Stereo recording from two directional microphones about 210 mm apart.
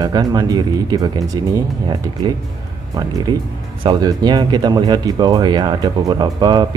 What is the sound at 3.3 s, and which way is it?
Speech, 20° right (ahead or behind).